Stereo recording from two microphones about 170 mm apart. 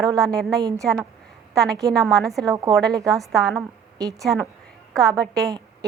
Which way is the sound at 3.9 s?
20° right (ahead or behind).